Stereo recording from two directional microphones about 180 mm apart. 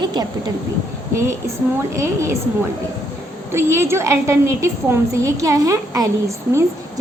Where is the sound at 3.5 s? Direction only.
15° right (ahead or behind).